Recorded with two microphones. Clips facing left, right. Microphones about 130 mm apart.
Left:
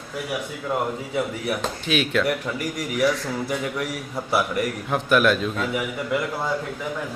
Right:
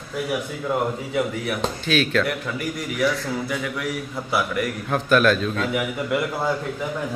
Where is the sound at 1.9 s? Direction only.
20° left (ahead or behind).